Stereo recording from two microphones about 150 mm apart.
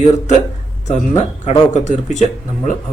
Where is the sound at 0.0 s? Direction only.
50° left (ahead or behind).